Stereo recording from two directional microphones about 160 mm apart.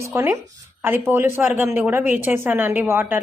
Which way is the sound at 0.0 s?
15° right (ahead or behind).